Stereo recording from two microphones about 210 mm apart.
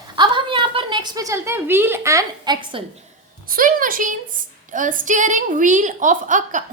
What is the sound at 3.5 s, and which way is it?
A woman's voice, 40° right (ahead or behind).